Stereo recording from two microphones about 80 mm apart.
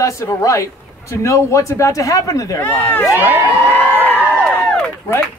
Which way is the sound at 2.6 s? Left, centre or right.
Left.